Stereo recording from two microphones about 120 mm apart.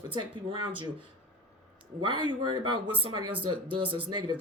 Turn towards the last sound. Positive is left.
turn(degrees=-45)  # may be behind; listen again after turning